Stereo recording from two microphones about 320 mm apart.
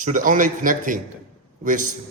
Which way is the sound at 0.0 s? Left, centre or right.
Right.